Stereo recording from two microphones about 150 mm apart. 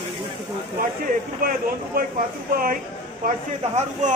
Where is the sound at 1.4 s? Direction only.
70° right (ahead or behind).